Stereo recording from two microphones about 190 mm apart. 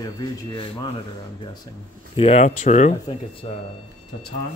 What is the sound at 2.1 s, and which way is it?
Speech, 30° left (ahead or behind).